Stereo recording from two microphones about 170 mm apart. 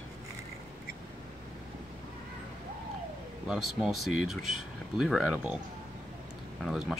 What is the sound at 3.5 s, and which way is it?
Speech, centre (ahead or behind).